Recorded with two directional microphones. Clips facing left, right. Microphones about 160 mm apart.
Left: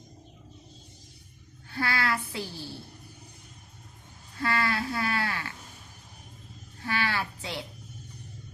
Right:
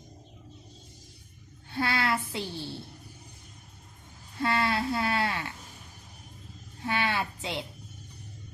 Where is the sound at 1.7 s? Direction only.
20° right (ahead or behind).